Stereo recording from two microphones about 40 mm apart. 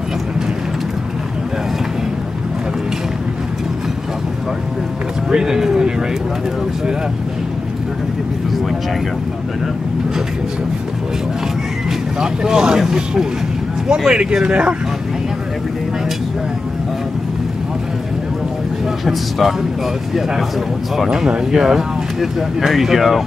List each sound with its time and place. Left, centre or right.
5.3 s a sound: centre
12.2 s speech: centre
19.0 s speech: centre
21.1 s speech: centre